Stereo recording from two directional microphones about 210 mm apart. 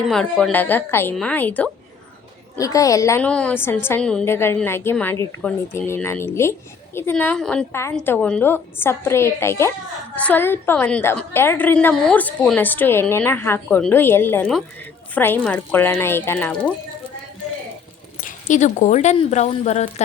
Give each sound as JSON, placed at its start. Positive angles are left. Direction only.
{"t": 0.1, "sound": "a woman's voice", "side_deg": 5}
{"t": 18.2, "sound": "speech", "side_deg": 40}